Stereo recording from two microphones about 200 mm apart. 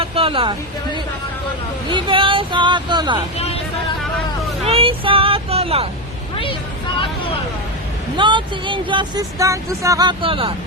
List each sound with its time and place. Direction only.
0.0 s a sound: 30° right (ahead or behind)
1.9 s speech: 25° right (ahead or behind)
3.3 s speech: 30° left (ahead or behind)
4.6 s speech: 30° right (ahead or behind)
6.3 s vehicle: 25° left (ahead or behind)
8.1 s speech: 25° right (ahead or behind)